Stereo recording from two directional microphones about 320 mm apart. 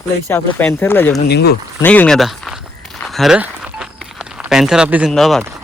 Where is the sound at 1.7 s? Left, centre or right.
Centre.